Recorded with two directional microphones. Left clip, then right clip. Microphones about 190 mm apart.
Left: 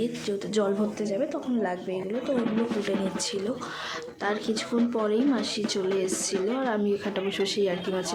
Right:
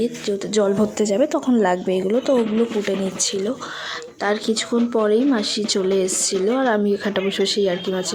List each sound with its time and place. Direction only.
0.0 s a woman's voice: 35° right (ahead or behind); by 2.3 s 50° right (ahead or behind)
2.8 s speech: 35° right (ahead or behind)